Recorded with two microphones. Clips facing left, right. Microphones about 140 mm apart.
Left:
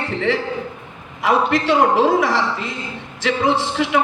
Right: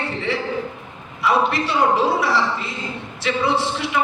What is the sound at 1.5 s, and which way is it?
Speech, 90° left.